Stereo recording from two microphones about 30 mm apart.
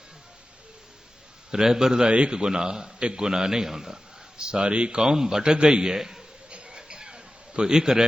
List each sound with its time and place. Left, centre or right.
1.5 s a man's voice: centre
2.0 s speech: right
2.3 s a man's voice: right
4.4 s speech: right
5.0 s a man's voice: centre
6.7 s a sound: right